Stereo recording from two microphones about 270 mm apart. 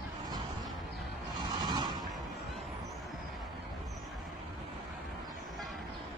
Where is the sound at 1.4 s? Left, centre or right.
Centre.